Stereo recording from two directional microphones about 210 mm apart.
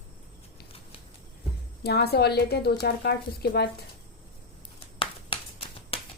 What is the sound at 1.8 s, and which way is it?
A woman's voice, 50° left (ahead or behind).